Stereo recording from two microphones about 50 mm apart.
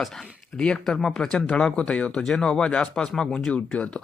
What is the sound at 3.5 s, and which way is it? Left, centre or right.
Speech, left.